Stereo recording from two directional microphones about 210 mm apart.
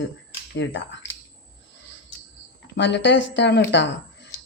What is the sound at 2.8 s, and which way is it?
Speech, 55° left (ahead or behind).